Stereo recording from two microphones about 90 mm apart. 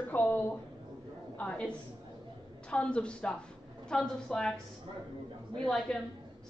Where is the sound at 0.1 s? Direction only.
20° left (ahead or behind).